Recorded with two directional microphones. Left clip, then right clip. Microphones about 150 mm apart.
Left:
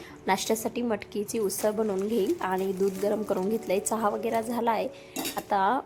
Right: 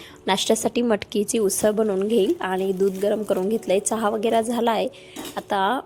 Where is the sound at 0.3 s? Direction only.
25° right (ahead or behind).